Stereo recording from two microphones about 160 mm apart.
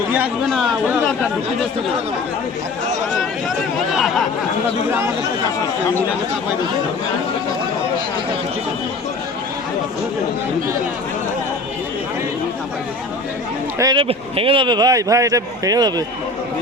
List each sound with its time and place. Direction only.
3.9 s speech: centre (ahead or behind)
13.7 s a man's voice: 20° right (ahead or behind)
14.0 s a man's voice: 35° right (ahead or behind)